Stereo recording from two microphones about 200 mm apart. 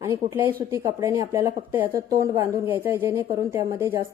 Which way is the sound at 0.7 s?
15° right (ahead or behind).